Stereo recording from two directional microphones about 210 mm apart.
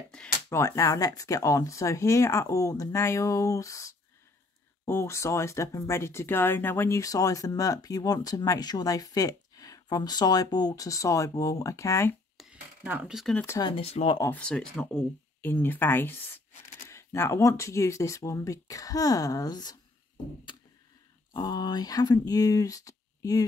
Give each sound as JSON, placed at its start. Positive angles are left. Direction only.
{"t": 0.1, "sound": "speech", "side_deg": 10}
{"t": 12.4, "sound": "speech", "side_deg": -5}
{"t": 13.6, "sound": "speech", "side_deg": 25}
{"t": 14.2, "sound": "speech", "side_deg": 5}
{"t": 21.3, "sound": "speech", "side_deg": 20}